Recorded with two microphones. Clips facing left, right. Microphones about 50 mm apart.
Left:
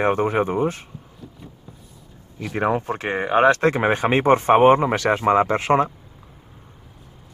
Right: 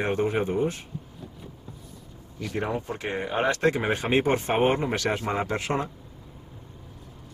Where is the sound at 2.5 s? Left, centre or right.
Left.